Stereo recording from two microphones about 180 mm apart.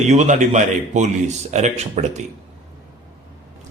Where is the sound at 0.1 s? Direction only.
40° right (ahead or behind).